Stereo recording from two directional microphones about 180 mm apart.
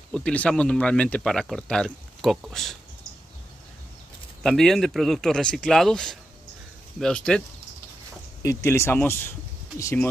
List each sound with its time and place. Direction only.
0.1 s speech: 5° left (ahead or behind)
4.4 s speech: 5° left (ahead or behind)
8.4 s speech: 15° left (ahead or behind)